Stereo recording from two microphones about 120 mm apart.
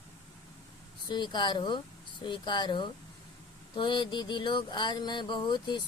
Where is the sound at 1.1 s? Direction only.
40° left (ahead or behind).